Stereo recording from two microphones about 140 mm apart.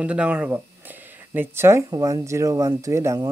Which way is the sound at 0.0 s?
10° right (ahead or behind).